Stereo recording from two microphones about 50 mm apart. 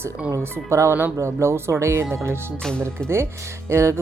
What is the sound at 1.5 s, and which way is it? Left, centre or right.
Speech, right.